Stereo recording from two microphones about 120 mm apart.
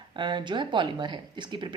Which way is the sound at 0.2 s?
40° right (ahead or behind).